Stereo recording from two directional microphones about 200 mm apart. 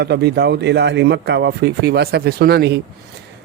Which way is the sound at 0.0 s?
55° right (ahead or behind).